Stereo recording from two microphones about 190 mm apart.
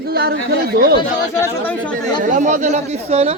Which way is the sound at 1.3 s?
10° left (ahead or behind).